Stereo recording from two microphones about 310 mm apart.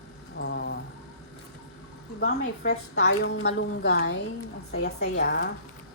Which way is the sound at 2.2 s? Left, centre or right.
Left.